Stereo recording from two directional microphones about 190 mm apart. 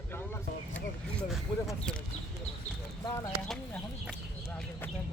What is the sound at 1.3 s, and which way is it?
Speech, centre (ahead or behind).